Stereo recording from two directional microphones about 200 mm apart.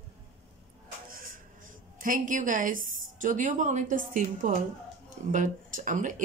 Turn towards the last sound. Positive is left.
turn(degrees=-40)  # may be behind; listen again after turning